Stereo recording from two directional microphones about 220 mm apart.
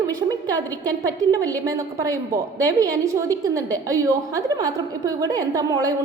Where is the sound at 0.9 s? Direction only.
15° right (ahead or behind).